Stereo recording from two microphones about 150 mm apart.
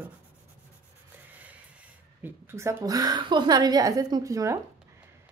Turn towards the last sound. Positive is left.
turn(degrees=-20)  # may be behind; listen again after turning